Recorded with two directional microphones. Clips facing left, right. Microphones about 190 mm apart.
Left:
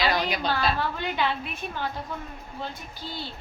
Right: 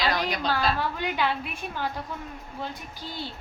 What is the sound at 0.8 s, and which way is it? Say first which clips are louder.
A woman's voice: even; 10° right (ahead or behind).